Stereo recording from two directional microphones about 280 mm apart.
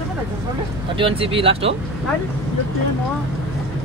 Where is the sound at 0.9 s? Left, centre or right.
Centre.